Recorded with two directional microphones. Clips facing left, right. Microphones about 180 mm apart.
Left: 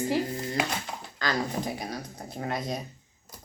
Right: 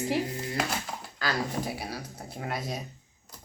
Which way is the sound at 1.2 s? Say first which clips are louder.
Left 1 dB; 5° right (ahead or behind).